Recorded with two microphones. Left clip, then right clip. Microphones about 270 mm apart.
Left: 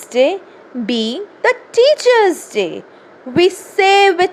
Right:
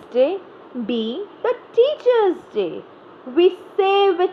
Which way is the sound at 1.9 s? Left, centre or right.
Left.